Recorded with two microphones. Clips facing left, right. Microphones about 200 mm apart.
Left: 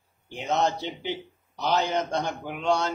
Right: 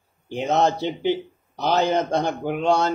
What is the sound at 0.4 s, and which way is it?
A man's voice, 55° right (ahead or behind).